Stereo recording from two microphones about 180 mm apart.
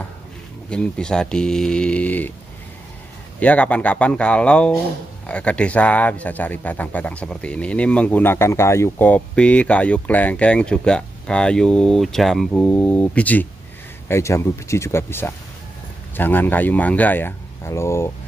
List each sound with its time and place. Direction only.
0.7 s speech: 5° left (ahead or behind)
3.3 s speech: 5° left (ahead or behind)